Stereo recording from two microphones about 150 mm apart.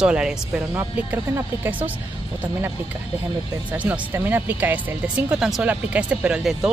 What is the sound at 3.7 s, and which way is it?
Speech, 10° right (ahead or behind).